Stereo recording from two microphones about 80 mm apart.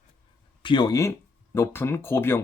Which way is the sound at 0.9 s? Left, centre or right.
Left.